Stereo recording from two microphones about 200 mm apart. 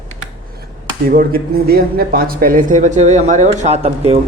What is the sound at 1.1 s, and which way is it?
Speech, 45° right (ahead or behind).